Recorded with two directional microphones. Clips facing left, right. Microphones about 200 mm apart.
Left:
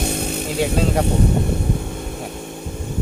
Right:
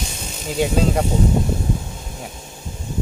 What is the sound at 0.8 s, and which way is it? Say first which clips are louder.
Speech: even; centre (ahead or behind).